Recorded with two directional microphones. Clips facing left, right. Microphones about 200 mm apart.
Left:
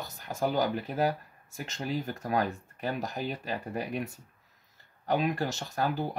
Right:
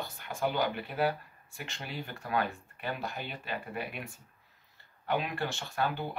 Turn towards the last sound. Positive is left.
turn(degrees=40)  # may be behind; listen again after turning